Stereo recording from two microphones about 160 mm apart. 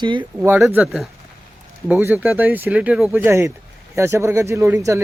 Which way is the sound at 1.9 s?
10° right (ahead or behind).